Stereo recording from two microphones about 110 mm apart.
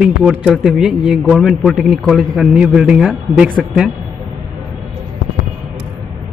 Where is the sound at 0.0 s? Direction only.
10° right (ahead or behind).